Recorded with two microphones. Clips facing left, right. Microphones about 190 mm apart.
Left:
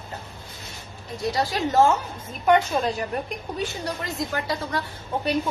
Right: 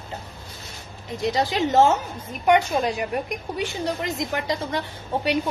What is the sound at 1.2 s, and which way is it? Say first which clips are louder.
A woman's voice: right 2 dB; 20° right (ahead or behind).